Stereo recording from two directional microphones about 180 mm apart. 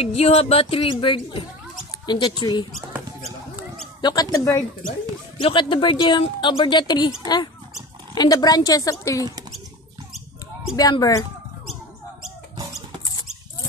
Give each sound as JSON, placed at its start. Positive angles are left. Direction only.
{"t": 0.0, "sound": "speech", "side_deg": 35}
{"t": 2.9, "sound": "a sound", "side_deg": -15}
{"t": 4.0, "sound": "speech", "side_deg": 20}
{"t": 5.4, "sound": "speech", "side_deg": 30}
{"t": 8.1, "sound": "speech", "side_deg": 20}
{"t": 10.8, "sound": "speech", "side_deg": 20}